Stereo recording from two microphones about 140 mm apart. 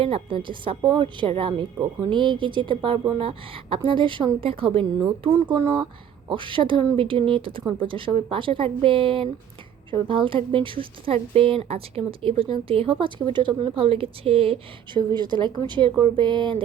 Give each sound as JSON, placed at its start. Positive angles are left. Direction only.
{"t": 0.0, "sound": "speech", "side_deg": -40}
{"t": 4.9, "sound": "speech", "side_deg": -30}
{"t": 6.2, "sound": "speech", "side_deg": -35}